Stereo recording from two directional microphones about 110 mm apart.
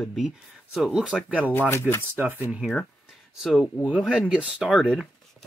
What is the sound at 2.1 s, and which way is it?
Speech, 15° right (ahead or behind).